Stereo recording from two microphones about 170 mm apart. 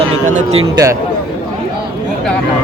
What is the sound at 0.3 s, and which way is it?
Speech, 45° right (ahead or behind).